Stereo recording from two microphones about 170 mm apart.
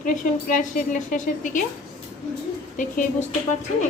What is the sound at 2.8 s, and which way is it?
Speech, 50° left (ahead or behind).